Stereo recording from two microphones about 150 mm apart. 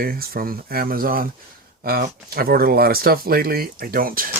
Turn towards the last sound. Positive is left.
turn(degrees=-75)  # may be behind; listen again after turning